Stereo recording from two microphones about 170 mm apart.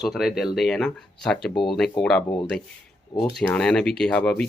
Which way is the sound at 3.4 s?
5° left (ahead or behind).